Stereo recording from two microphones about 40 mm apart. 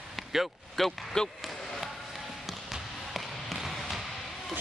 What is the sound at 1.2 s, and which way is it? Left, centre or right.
Speech, centre.